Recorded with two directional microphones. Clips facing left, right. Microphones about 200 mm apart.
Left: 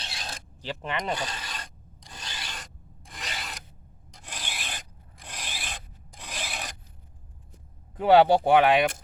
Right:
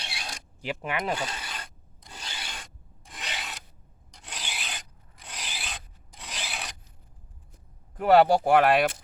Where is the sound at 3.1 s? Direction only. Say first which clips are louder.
Even; centre (ahead or behind).